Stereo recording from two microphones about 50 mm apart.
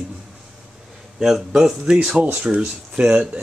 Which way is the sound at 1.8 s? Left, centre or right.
Centre.